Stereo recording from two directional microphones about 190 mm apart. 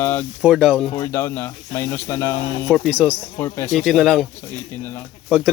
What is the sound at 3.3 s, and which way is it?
Speech, 15° left (ahead or behind).